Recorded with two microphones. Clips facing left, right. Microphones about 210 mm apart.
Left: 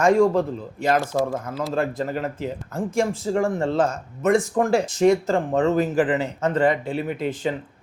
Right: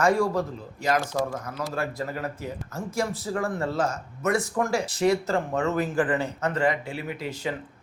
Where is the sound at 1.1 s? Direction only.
45° left (ahead or behind).